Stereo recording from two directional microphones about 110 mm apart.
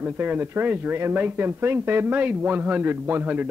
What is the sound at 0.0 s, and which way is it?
Speech, 15° right (ahead or behind).